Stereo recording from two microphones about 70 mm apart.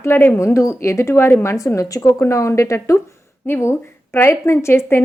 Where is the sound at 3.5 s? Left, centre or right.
Left.